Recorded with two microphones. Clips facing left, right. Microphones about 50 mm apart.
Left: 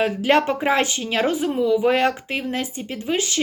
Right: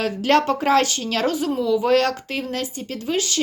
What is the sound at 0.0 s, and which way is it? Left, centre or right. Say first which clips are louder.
Speech: even; centre.